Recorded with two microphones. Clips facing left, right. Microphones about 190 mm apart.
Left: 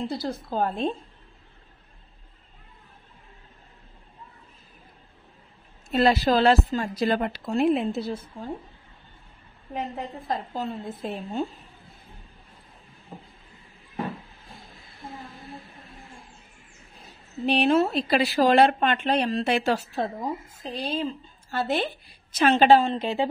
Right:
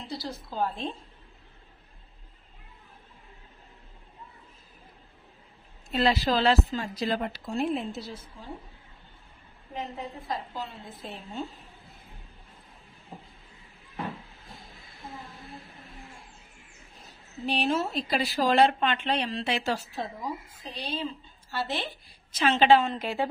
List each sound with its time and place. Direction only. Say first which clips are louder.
0.1 s a woman's voice: left 7 dB; 55° left (ahead or behind)
5.9 s a woman's voice: left 4 dB; 50° left (ahead or behind)
10.3 s speech: left 7 dB; 50° left (ahead or behind)
17.5 s speech: left 7 dB; 65° left (ahead or behind); by 23.2 s 25° left (ahead or behind)